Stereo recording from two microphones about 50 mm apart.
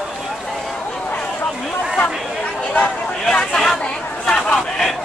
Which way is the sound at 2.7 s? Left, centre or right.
Left.